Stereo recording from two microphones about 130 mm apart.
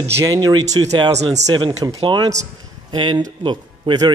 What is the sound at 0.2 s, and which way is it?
Speech, 30° right (ahead or behind).